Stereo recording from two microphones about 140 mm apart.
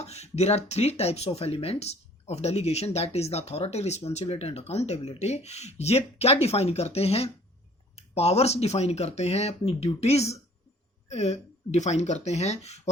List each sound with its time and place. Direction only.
0.0 s speech: 50° left (ahead or behind)